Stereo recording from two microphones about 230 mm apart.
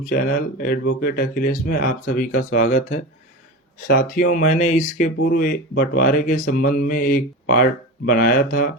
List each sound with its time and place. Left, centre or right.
0.1 s speech: left
6.3 s mantra: left
6.7 s speech: left